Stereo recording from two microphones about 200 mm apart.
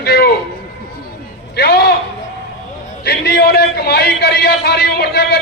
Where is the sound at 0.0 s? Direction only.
55° left (ahead or behind).